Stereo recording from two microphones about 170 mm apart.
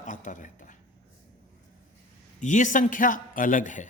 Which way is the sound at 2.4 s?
45° left (ahead or behind).